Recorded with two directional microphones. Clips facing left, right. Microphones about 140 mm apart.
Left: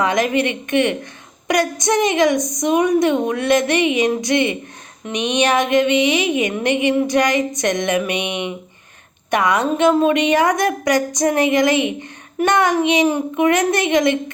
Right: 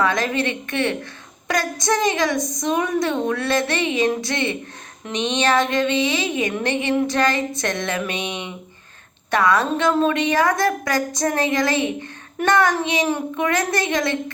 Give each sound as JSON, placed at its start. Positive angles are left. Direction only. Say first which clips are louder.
{"t": 0.0, "sound": "a woman's voice", "louder": "left 3 dB", "side_deg": 20}